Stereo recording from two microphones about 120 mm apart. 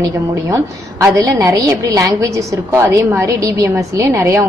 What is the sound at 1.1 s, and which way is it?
A woman's voice, 25° right (ahead or behind).